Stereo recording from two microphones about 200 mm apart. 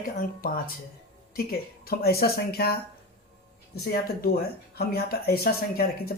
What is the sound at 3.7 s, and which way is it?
Speech, 50° left (ahead or behind).